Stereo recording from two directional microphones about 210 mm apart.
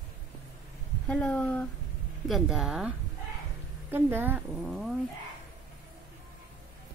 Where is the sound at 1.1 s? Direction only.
5° left (ahead or behind).